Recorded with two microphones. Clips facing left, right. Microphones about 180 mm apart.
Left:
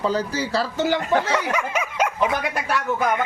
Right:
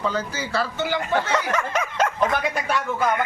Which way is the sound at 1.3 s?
10° left (ahead or behind).